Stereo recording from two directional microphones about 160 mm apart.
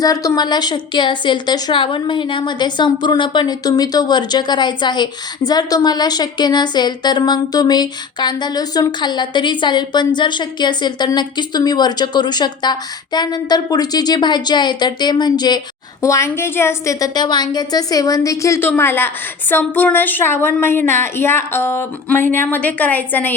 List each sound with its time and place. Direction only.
0.0 s a woman's voice: 20° left (ahead or behind)